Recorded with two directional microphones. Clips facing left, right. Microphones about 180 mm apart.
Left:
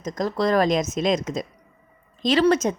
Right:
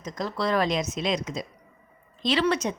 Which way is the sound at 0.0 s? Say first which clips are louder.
Left 5 dB; 45° left (ahead or behind).